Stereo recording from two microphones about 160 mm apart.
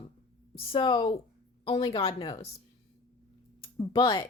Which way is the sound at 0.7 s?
35° left (ahead or behind).